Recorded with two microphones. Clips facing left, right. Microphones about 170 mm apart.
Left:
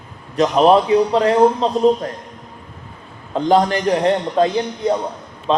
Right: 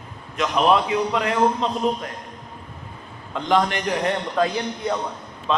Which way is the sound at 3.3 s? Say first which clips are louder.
Left 6 dB; 35° left (ahead or behind).